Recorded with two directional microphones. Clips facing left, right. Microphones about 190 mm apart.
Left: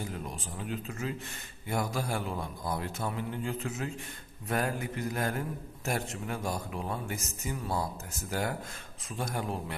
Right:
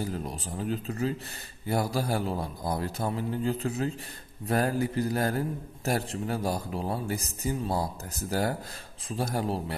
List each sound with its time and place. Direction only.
0.0 s a man's voice: 35° right (ahead or behind)